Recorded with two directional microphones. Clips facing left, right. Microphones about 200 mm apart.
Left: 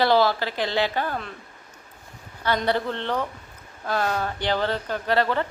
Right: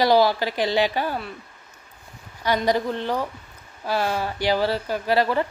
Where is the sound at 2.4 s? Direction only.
10° right (ahead or behind).